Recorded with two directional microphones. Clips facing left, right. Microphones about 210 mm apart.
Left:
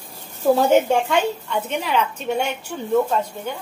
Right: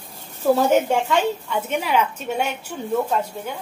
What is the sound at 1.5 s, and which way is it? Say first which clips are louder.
A woman's voice: right 1 dB; 10° right (ahead or behind).